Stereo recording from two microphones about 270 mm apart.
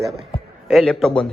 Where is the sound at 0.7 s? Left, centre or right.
Centre.